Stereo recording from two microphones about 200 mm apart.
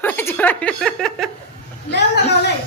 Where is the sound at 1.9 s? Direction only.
55° left (ahead or behind).